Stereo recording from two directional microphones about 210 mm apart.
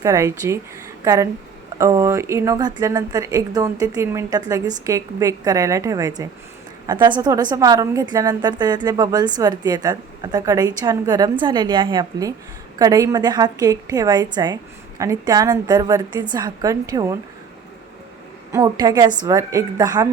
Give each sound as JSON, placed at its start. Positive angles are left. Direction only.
{"t": 0.0, "sound": "a woman's voice", "side_deg": -15}
{"t": 18.5, "sound": "a woman's voice", "side_deg": -20}